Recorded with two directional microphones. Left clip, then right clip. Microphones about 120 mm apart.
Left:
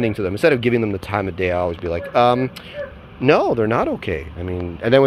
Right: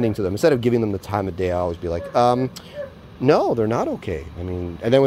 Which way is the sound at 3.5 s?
25° right (ahead or behind).